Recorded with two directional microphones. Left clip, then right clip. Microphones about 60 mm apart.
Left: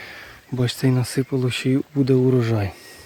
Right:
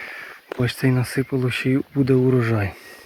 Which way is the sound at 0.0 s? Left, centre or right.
Left.